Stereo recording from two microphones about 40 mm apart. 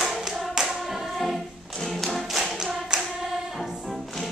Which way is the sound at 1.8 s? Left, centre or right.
Centre.